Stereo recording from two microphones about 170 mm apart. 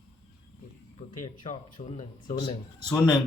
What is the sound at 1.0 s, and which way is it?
Speech, 40° left (ahead or behind).